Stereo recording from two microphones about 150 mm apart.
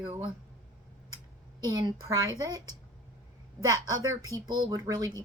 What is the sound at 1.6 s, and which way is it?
Speech, 25° right (ahead or behind).